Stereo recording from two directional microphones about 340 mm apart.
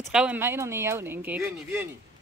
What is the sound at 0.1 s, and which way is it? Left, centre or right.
Speech, centre.